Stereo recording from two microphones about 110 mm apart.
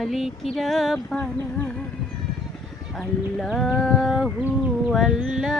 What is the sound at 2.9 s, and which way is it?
Speech, 5° left (ahead or behind).